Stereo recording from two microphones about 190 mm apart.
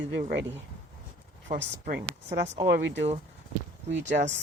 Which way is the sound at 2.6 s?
60° right (ahead or behind).